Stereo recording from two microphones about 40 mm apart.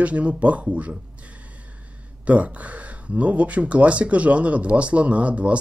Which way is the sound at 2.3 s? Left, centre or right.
Right.